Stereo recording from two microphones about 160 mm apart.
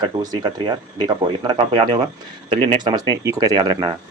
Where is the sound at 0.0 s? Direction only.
25° right (ahead or behind).